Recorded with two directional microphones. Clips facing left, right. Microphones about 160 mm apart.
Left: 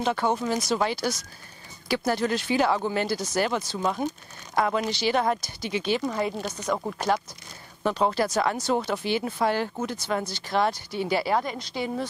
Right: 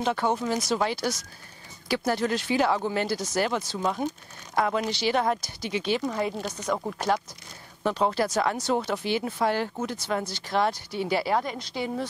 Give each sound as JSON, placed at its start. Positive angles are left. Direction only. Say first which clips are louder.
{"t": 0.0, "sound": "speech", "louder": "left 1 dB", "side_deg": 15}